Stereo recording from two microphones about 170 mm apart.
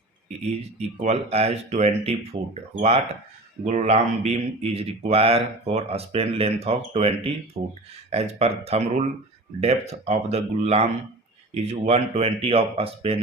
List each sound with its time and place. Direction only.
0.8 s speech: 40° right (ahead or behind)